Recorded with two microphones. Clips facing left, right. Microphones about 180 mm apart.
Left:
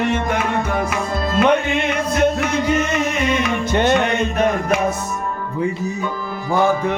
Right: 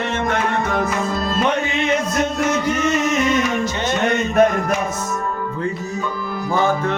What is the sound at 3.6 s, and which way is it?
Music, 60° left (ahead or behind).